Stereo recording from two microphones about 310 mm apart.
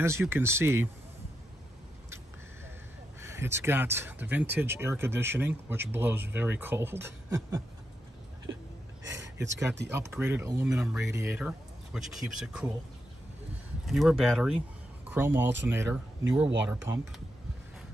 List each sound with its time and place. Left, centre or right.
0.0 s speech: centre
3.2 s speech: centre
9.0 s a sound: right
9.9 s speech: centre
13.8 s speech: centre